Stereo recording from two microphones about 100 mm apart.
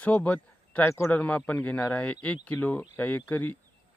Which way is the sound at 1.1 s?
15° left (ahead or behind).